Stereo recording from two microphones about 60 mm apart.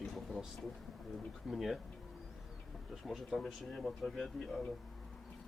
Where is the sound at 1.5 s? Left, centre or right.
Centre.